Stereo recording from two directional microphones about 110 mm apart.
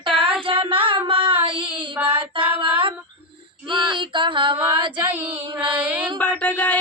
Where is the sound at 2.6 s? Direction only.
50° right (ahead or behind).